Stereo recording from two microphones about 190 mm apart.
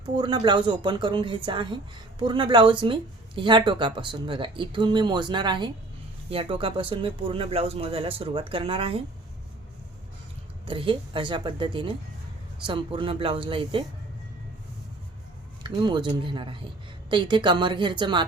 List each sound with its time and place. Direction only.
0.0 s a woman's voice: 25° right (ahead or behind)
10.7 s a woman's voice: 25° right (ahead or behind)
15.6 s a woman's voice: 25° right (ahead or behind)